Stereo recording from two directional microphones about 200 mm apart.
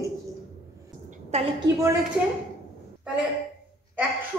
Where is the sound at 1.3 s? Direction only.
35° right (ahead or behind).